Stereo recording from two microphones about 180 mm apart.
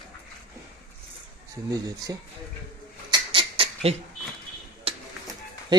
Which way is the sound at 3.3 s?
30° right (ahead or behind).